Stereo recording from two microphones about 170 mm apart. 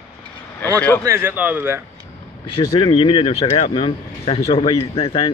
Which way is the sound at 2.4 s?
30° left (ahead or behind).